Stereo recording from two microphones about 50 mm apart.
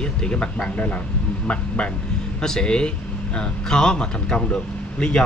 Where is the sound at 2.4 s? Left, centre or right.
Centre.